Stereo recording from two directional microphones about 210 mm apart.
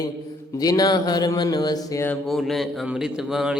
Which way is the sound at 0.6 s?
20° left (ahead or behind).